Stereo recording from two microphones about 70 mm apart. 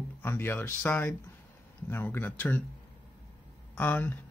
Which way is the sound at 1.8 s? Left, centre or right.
Left.